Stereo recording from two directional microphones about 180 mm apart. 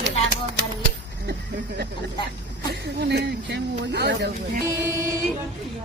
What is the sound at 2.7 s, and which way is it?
Speech, 65° right (ahead or behind).